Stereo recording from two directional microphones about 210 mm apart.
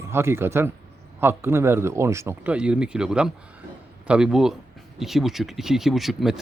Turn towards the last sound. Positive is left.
turn(degrees=0)  # may be behind; listen again after turning